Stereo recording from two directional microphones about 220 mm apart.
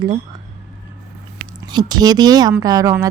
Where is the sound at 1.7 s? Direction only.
20° right (ahead or behind).